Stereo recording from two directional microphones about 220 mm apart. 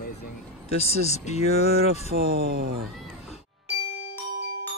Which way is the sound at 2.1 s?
45° right (ahead or behind).